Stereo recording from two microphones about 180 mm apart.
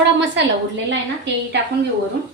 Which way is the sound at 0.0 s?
75° right (ahead or behind).